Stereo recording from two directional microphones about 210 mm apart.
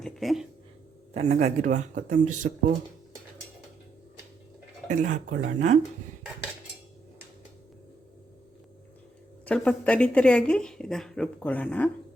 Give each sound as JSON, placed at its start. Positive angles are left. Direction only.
{"t": 0.0, "sound": "a sound", "side_deg": 0}
{"t": 1.1, "sound": "speech", "side_deg": -30}
{"t": 4.9, "sound": "speech", "side_deg": -35}
{"t": 9.5, "sound": "a woman's voice", "side_deg": 5}